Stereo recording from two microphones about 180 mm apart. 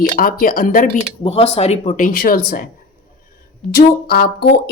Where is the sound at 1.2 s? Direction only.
35° left (ahead or behind); by 2.6 s 55° left (ahead or behind).